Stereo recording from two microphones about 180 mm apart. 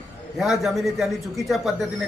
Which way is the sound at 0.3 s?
Centre (ahead or behind).